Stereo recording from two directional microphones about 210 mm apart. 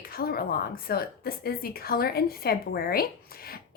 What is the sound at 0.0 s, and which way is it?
A woman's voice, 45° left (ahead or behind).